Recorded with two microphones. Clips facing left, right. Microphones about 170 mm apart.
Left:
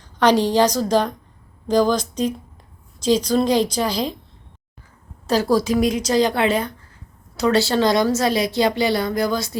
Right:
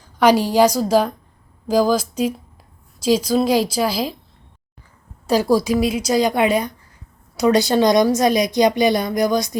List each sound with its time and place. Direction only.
0.0 s a woman's voice: 10° right (ahead or behind)
5.2 s a woman's voice: 10° right (ahead or behind)